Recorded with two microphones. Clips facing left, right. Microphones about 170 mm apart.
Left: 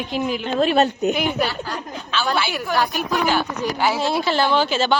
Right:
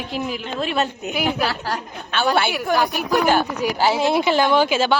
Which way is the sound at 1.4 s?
85° right.